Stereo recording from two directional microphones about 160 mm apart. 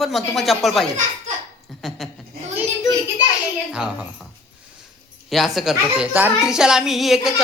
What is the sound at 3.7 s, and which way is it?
Speech, 5° right (ahead or behind).